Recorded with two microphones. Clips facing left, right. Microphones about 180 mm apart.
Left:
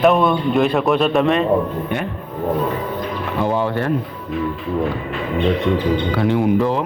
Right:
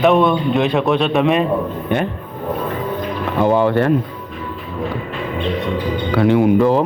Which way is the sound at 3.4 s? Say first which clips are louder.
Right 6 dB; 65° right (ahead or behind).